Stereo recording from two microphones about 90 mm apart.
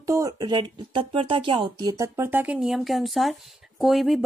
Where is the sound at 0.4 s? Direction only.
55° right (ahead or behind).